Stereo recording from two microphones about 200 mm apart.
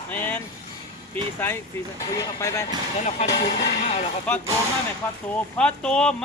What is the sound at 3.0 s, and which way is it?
Speech, 35° left (ahead or behind).